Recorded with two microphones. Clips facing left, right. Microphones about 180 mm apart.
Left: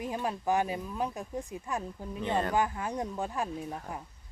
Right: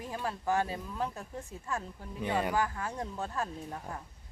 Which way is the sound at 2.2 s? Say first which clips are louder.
Left 1 dB; 10° right (ahead or behind).